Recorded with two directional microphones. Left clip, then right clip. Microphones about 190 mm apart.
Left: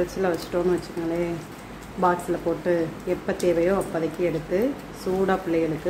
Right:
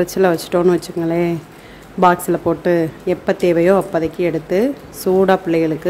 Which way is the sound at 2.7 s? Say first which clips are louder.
Right 7 dB; 45° right (ahead or behind).